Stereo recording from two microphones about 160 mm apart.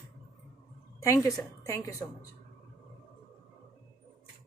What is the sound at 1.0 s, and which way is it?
A woman's voice, 20° left (ahead or behind).